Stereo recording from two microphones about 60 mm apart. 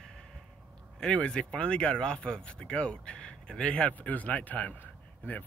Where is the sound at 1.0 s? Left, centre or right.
Centre.